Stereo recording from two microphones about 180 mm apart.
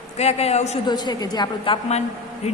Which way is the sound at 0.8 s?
25° left (ahead or behind).